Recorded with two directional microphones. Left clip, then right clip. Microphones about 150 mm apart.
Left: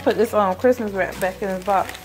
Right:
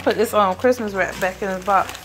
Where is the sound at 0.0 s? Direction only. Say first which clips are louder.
Right 1 dB; 20° left (ahead or behind).